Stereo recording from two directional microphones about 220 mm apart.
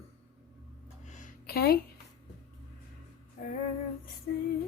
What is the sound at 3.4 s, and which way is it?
Female singing, 35° left (ahead or behind).